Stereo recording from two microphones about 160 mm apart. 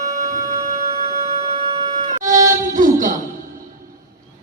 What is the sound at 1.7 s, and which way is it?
Wind instrument, 35° right (ahead or behind).